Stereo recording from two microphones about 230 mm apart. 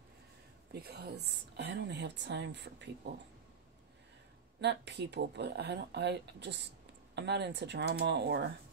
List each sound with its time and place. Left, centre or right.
0.7 s speech: right
4.6 s speech: right